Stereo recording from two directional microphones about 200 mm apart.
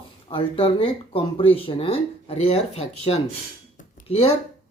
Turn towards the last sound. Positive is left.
turn(degrees=30)  # may be behind; listen again after turning